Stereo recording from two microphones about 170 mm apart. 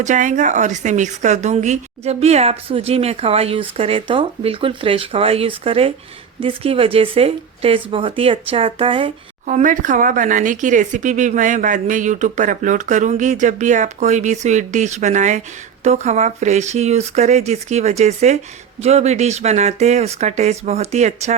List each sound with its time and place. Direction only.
0.0 s a woman's voice: 45° right (ahead or behind); by 9.1 s 30° right (ahead or behind)
9.5 s a woman's voice: 50° right (ahead or behind)